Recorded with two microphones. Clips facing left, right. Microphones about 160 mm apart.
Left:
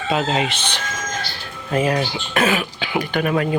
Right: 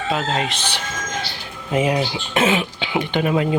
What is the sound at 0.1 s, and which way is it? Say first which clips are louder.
Speech: left 3 dB; centre (ahead or behind).